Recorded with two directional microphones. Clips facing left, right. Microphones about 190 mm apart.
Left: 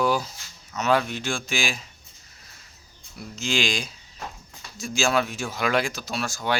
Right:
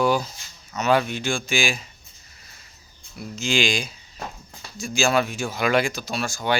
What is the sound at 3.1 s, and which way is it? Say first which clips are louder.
Speech: right 3 dB; centre (ahead or behind).